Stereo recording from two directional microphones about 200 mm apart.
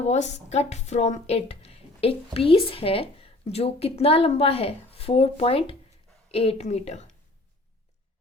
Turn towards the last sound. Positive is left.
turn(degrees=35)  # may be behind; listen again after turning